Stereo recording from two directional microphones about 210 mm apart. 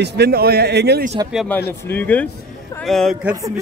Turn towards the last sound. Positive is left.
turn(degrees=0)  # may be behind; listen again after turning